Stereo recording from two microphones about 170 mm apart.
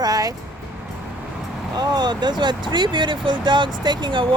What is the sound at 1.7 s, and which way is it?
Speech, 25° right (ahead or behind).